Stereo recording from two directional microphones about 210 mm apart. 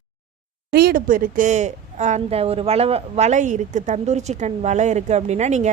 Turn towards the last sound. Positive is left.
turn(degrees=-35)  # may be behind; listen again after turning